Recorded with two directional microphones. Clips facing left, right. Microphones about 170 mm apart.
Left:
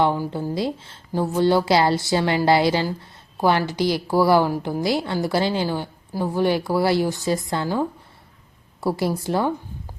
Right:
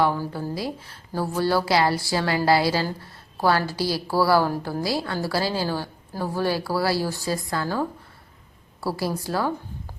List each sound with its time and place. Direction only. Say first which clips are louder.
0.0 s a woman's voice: left 2 dB; 20° left (ahead or behind)